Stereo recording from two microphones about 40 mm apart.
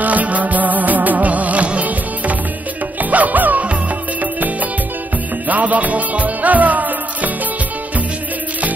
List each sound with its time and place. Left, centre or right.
0.0 s music: right